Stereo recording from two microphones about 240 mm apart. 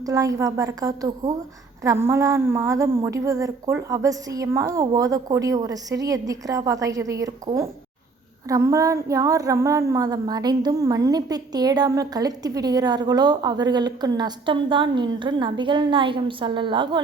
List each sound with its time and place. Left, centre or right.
0.0 s a woman's voice: centre